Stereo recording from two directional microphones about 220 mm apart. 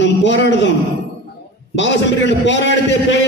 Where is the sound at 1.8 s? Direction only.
55° left (ahead or behind).